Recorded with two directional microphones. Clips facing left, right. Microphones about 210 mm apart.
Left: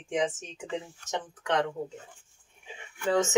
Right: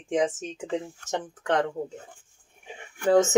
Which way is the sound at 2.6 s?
45° right (ahead or behind).